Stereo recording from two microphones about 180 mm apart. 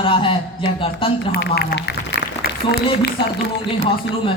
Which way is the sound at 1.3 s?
60° left (ahead or behind).